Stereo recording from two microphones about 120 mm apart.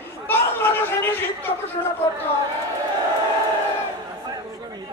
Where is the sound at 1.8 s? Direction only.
35° left (ahead or behind).